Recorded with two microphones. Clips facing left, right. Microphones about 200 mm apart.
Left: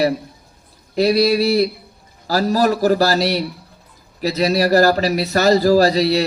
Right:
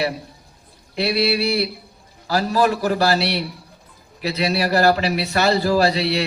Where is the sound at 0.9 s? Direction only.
40° left (ahead or behind).